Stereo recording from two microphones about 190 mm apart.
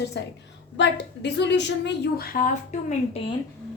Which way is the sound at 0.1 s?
65° left (ahead or behind).